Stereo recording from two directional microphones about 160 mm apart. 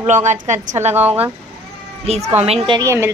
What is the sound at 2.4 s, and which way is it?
Speech, 40° right (ahead or behind).